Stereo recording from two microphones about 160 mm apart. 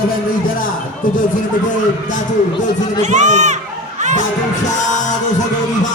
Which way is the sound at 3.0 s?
45° right (ahead or behind).